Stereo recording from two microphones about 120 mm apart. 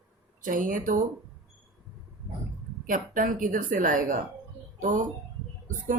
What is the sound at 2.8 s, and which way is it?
Speech, 90° right.